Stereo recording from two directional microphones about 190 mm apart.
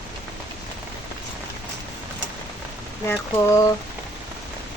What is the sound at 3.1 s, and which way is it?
Speech, 15° left (ahead or behind).